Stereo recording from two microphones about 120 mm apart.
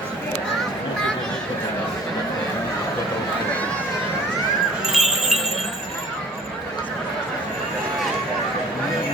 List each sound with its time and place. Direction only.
4.9 s wind chime: 5° right (ahead or behind)